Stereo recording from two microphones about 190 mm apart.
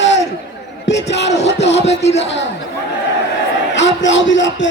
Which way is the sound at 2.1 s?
70° left (ahead or behind).